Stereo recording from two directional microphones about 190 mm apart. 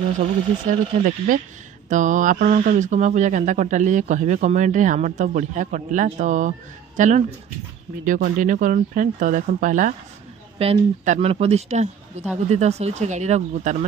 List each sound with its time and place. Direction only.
0.7 s speech: 45° right (ahead or behind)
10.6 s speech: 30° right (ahead or behind)